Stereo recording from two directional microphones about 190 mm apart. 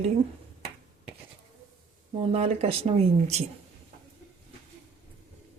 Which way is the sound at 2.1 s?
35° right (ahead or behind).